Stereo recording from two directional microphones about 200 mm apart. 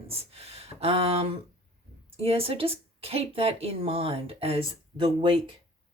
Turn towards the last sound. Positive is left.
turn(degrees=-25)  # may be behind; listen again after turning